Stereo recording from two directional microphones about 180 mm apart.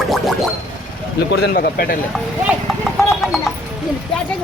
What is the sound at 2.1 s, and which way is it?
Clip-clop, centre (ahead or behind).